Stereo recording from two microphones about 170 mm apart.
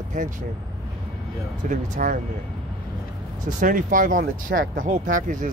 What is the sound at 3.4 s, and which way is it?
Speech, 55° right (ahead or behind).